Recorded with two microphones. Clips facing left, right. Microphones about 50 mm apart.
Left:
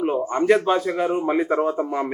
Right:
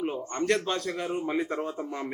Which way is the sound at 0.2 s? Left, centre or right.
Centre.